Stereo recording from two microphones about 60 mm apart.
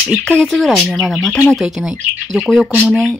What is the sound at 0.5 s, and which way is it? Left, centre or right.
Speech, centre.